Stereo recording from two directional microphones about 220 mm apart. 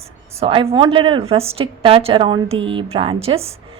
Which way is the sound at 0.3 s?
25° right (ahead or behind).